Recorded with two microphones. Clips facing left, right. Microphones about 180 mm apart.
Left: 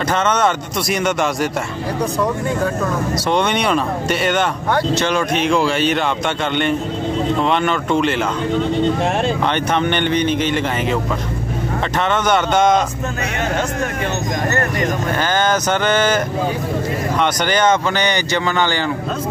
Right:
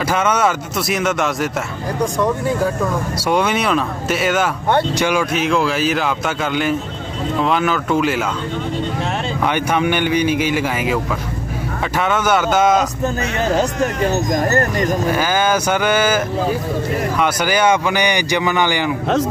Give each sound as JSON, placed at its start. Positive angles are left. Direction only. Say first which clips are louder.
{"t": 0.1, "sound": "a man's voice", "louder": "even", "side_deg": -5}
{"t": 9.4, "sound": "speech", "louder": "even", "side_deg": -10}
{"t": 12.0, "sound": "a man's voice", "louder": "right 1 dB", "side_deg": -5}
{"t": 13.4, "sound": "speech", "louder": "right 4 dB", "side_deg": -35}
{"t": 15.0, "sound": "speech", "louder": "right 1 dB", "side_deg": -10}